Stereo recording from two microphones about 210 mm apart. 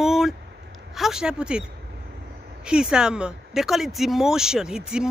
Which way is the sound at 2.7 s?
5° right (ahead or behind).